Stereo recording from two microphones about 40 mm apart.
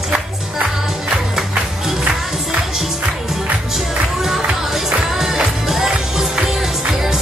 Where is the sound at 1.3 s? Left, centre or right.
Centre.